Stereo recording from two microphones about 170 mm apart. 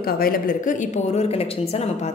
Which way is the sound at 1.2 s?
35° left (ahead or behind).